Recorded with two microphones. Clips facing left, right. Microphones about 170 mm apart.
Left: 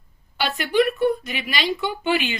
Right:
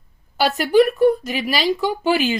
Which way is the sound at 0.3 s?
40° right (ahead or behind).